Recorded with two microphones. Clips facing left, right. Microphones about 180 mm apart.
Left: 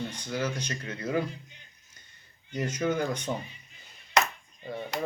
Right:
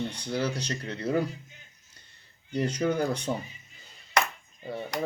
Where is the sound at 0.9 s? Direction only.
30° right (ahead or behind).